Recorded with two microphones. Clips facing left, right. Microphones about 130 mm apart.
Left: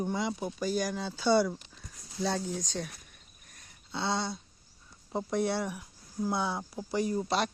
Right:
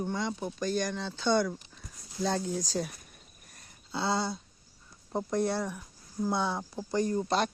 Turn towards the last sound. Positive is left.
turn(degrees=5)  # may be behind; listen again after turning